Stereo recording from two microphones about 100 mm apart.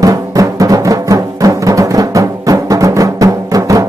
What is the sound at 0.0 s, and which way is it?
Music, 35° right (ahead or behind).